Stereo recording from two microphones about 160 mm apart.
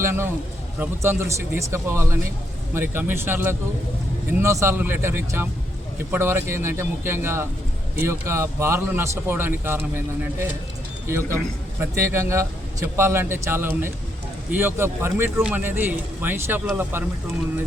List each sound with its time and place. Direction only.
0.0 s a man's voice: 15° right (ahead or behind)
11.8 s a man's voice: 15° right (ahead or behind)